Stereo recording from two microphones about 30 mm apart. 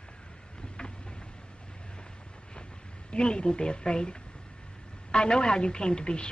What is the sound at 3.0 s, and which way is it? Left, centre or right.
A man's voice, left.